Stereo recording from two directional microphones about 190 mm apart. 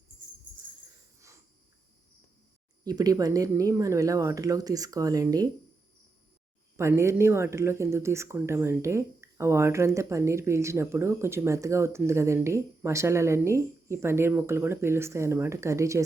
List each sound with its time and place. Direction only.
2.8 s speech: 20° right (ahead or behind)
6.7 s speech: 15° right (ahead or behind)